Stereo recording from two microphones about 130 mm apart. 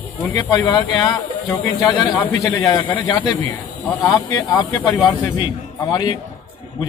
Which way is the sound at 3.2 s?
15° left (ahead or behind).